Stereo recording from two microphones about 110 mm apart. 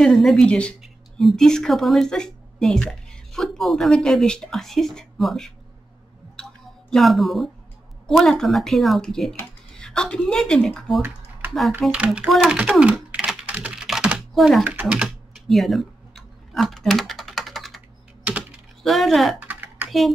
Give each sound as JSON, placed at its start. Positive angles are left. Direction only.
{"t": 0.0, "sound": "a woman's voice", "side_deg": 0}
{"t": 6.9, "sound": "speech", "side_deg": 0}
{"t": 11.9, "sound": "speech", "side_deg": -10}
{"t": 12.3, "sound": "typing", "side_deg": -5}
{"t": 14.6, "sound": "speech", "side_deg": -15}
{"t": 15.4, "sound": "typing", "side_deg": 0}
{"t": 18.2, "sound": "typing", "side_deg": -10}
{"t": 18.8, "sound": "speech", "side_deg": 0}
{"t": 19.4, "sound": "typing", "side_deg": -20}